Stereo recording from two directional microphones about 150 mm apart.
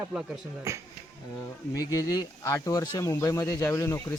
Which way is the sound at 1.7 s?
25° left (ahead or behind).